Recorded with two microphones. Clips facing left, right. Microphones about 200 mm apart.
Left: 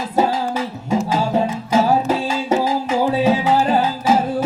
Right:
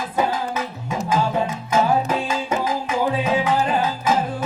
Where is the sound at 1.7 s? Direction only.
40° left (ahead or behind).